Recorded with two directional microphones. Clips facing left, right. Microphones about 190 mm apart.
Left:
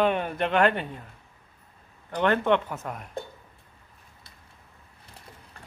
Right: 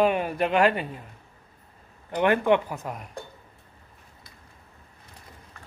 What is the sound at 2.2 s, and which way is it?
Speech, 10° right (ahead or behind).